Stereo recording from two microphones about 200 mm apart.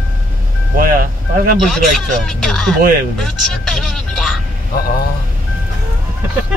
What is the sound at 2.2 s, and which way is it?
Speech, centre (ahead or behind).